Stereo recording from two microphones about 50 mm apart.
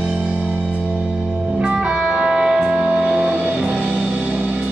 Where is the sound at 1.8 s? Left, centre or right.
Centre.